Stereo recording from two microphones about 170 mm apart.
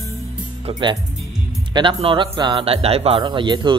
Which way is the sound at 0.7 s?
30° right (ahead or behind).